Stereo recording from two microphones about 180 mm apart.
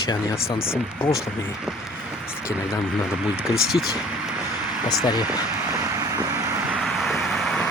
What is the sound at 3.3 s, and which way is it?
Speech, centre (ahead or behind).